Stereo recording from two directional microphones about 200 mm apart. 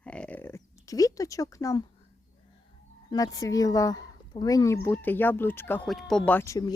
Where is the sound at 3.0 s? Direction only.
20° left (ahead or behind).